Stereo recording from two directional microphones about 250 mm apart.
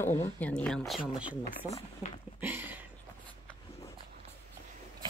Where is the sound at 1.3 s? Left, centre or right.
Left.